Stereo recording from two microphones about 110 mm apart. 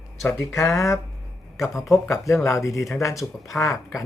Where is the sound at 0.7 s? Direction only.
25° left (ahead or behind).